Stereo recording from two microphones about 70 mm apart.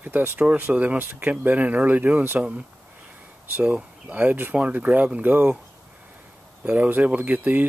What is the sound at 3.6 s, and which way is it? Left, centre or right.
Speech, right.